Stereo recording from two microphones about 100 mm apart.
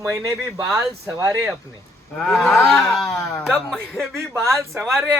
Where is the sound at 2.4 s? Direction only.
Centre (ahead or behind).